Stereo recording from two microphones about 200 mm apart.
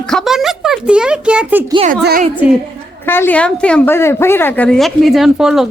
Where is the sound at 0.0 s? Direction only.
5° left (ahead or behind).